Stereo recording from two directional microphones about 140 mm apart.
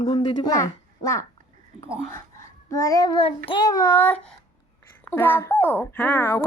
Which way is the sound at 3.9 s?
10° left (ahead or behind).